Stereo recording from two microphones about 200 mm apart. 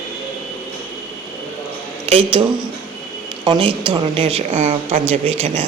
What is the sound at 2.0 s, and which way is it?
Speech, 30° right (ahead or behind).